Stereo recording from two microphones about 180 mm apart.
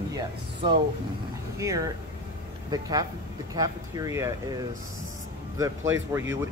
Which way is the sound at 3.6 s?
20° right (ahead or behind).